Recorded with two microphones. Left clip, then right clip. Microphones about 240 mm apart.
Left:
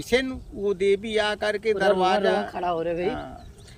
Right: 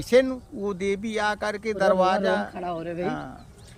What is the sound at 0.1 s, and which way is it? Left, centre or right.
A man's voice, centre.